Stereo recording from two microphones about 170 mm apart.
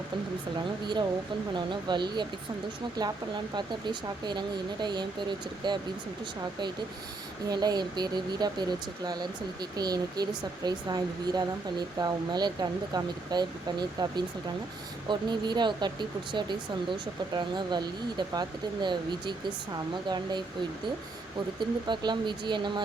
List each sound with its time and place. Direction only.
1.5 s speech: 25° right (ahead or behind)
7.4 s speech: 25° right (ahead or behind)
21.6 s speech: 25° right (ahead or behind)